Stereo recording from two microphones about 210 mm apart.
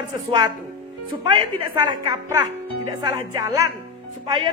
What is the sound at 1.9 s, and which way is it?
Speech, 20° right (ahead or behind).